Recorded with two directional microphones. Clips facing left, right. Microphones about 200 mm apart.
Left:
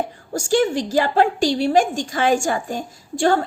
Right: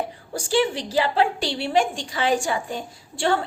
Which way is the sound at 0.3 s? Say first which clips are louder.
Left 4 dB; 45° left (ahead or behind).